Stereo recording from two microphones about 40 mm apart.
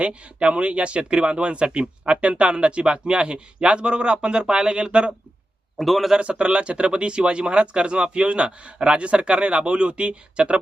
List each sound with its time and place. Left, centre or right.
0.0 s speech: right
5.7 s a man's voice: centre
6.1 s speech: right